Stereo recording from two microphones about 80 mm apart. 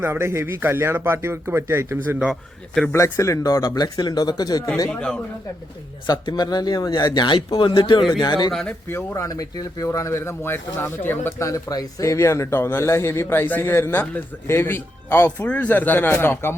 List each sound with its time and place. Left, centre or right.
0.0 s speech: right
2.2 s speech: centre
2.9 s speech: left
4.9 s speech: centre
6.1 s speech: left
8.2 s speech: left
8.9 s speech: left
9.1 s a man's voice: left
11.3 s a man's voice: left
11.7 s speech: left
12.0 s a man's voice: left